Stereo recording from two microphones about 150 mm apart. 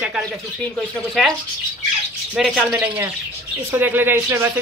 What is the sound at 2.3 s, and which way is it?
Speech, centre (ahead or behind).